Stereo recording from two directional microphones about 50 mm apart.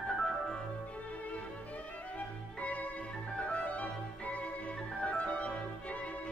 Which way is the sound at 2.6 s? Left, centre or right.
Left.